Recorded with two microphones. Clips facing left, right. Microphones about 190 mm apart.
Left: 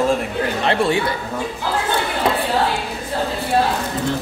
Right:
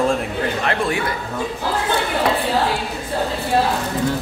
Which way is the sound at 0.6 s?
30° left (ahead or behind).